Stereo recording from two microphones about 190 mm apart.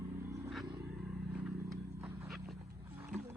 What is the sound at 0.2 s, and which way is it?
Vehicle, 15° right (ahead or behind).